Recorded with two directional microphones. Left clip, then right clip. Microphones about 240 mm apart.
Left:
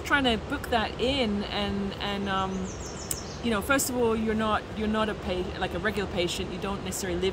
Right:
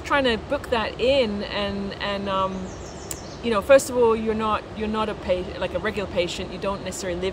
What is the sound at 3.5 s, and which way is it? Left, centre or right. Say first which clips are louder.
Speech: right 10 dB; centre.